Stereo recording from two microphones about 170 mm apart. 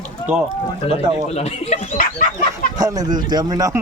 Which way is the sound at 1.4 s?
50° left (ahead or behind).